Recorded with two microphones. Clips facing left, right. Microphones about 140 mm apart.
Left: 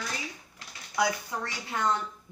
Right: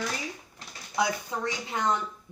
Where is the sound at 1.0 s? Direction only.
20° right (ahead or behind).